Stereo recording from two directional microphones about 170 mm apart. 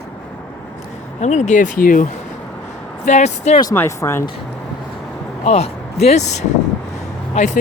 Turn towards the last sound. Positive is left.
turn(degrees=45)  # may be behind; listen again after turning